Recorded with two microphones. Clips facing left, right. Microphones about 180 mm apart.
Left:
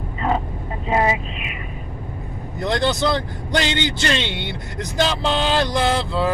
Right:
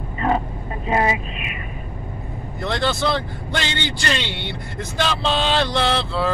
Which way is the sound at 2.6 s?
20° left (ahead or behind).